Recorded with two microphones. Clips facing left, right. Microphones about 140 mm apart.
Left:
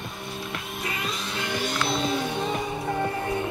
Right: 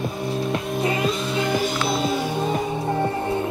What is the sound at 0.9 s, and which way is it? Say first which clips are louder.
Music: right 9 dB; centre (ahead or behind).